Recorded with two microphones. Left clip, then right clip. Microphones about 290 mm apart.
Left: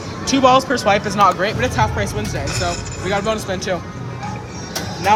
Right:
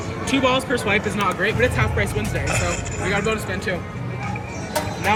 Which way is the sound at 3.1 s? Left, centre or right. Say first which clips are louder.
Left 3 dB; centre.